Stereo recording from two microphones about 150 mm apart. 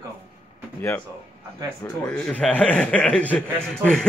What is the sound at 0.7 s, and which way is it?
A man's voice, 15° left (ahead or behind).